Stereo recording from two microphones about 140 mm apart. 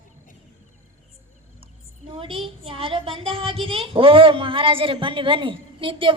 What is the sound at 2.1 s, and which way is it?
Speech, 40° right (ahead or behind).